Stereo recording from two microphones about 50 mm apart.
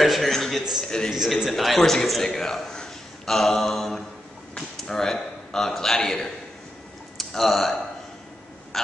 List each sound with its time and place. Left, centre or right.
0.0 s a man's voice: centre
0.8 s a man's voice: centre
1.1 s a man's voice: centre